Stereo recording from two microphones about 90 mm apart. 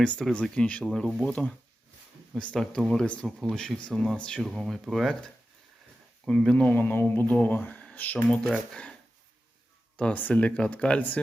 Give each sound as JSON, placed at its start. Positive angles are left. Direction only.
{"t": 0.0, "sound": "speech", "side_deg": 10}
{"t": 10.0, "sound": "speech", "side_deg": 15}